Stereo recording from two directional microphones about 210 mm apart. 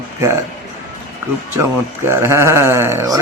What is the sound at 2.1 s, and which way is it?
Speech, 10° right (ahead or behind).